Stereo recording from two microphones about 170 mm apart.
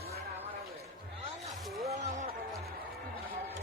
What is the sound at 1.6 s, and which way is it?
Music, centre (ahead or behind).